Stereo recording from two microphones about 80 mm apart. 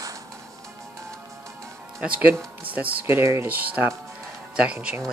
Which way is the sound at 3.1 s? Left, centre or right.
Right.